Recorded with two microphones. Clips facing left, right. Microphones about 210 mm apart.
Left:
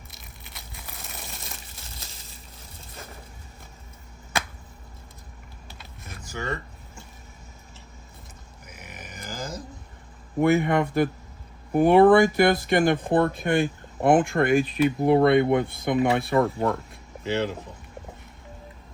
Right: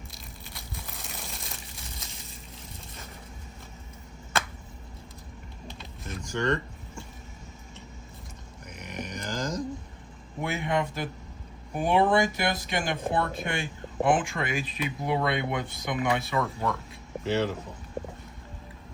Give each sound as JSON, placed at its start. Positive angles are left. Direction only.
{"t": 0.5, "sound": "crumpling", "side_deg": 0}
{"t": 6.1, "sound": "speech", "side_deg": 5}
{"t": 8.6, "sound": "grunt", "side_deg": 5}
{"t": 10.4, "sound": "speech", "side_deg": 55}